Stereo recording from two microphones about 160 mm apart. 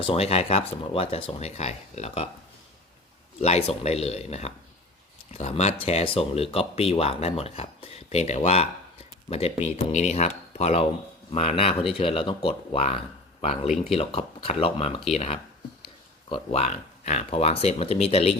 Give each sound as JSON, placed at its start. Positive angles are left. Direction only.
{"t": 0.0, "sound": "speech", "side_deg": 35}
{"t": 3.4, "sound": "speech", "side_deg": 40}